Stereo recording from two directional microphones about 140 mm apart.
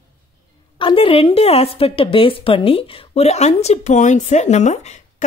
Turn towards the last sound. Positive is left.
turn(degrees=55)  # may be behind; listen again after turning